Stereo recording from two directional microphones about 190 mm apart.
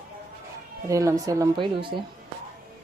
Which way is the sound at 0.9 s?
15° right (ahead or behind).